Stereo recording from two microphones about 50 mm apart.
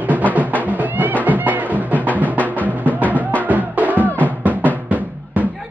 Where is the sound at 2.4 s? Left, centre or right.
Left.